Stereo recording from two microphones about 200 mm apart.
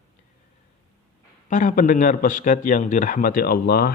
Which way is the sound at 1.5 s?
40° left (ahead or behind).